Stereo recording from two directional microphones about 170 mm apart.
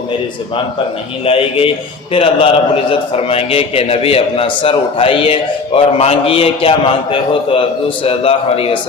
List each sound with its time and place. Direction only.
1.2 s a man's voice: 35° left (ahead or behind)